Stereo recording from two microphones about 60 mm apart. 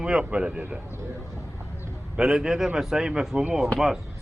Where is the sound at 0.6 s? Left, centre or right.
Right.